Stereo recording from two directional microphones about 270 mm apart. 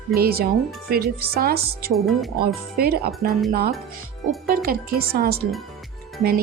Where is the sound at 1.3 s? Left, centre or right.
Right.